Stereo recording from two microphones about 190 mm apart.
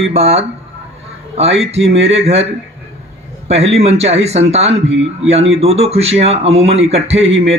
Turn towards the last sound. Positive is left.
turn(degrees=-35)  # may be behind; listen again after turning